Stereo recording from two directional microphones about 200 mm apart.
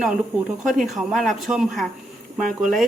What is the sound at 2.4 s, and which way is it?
Speech, 40° right (ahead or behind).